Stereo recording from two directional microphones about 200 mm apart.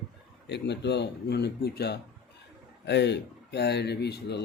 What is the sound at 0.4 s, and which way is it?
Speech, 60° left (ahead or behind).